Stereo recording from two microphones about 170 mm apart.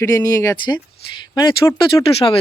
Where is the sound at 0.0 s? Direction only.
20° left (ahead or behind).